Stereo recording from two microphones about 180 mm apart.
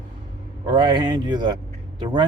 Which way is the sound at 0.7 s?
25° right (ahead or behind).